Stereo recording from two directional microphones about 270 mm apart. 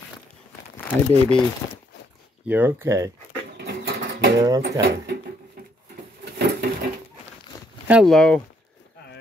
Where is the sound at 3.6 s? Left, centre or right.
Right.